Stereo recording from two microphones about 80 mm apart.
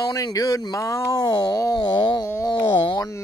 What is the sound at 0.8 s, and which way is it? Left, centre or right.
Speech, left.